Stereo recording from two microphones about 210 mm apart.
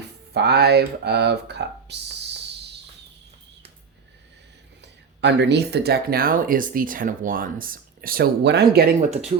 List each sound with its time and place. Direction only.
0.3 s speech: 50° right (ahead or behind)
5.2 s speech: 55° right (ahead or behind)
9.0 s speech: 30° right (ahead or behind)